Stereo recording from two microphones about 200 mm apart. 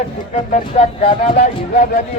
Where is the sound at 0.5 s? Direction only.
30° left (ahead or behind).